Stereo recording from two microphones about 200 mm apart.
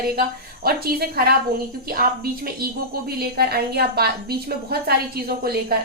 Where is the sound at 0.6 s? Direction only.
50° right (ahead or behind).